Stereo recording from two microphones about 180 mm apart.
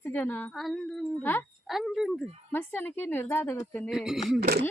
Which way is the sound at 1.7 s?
Centre (ahead or behind).